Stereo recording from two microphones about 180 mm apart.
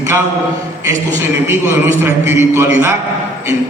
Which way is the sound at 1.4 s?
15° right (ahead or behind).